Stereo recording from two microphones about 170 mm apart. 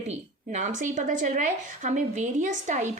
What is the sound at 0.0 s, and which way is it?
A woman's voice, 45° right (ahead or behind).